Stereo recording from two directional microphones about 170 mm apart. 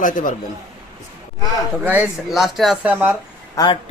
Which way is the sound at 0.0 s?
50° left (ahead or behind).